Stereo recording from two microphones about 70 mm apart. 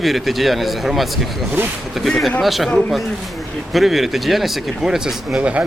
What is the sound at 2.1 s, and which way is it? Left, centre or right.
Speech, centre.